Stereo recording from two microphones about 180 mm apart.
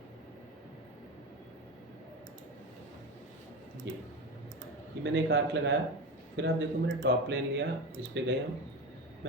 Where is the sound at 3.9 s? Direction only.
75° right (ahead or behind).